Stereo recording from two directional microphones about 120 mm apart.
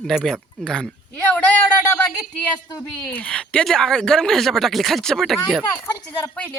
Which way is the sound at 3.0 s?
15° left (ahead or behind).